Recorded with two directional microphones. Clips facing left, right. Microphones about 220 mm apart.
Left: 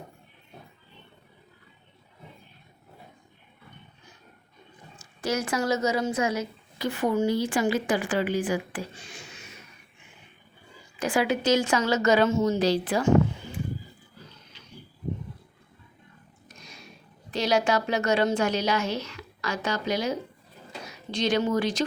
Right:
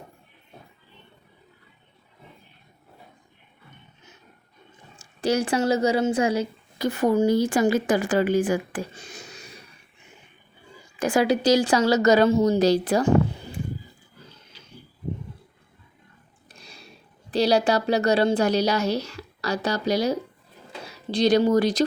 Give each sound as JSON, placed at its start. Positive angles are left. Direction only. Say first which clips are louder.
{"t": 4.9, "sound": "speech", "louder": "right 5 dB", "side_deg": -30}
{"t": 11.0, "sound": "a woman's voice", "louder": "right 4 dB", "side_deg": -40}
{"t": 16.5, "sound": "a sound", "louder": "even", "side_deg": -35}
{"t": 17.3, "sound": "a woman's voice", "louder": "right 4 dB", "side_deg": -35}